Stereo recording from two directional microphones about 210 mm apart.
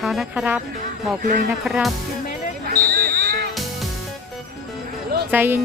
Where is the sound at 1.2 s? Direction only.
40° right (ahead or behind).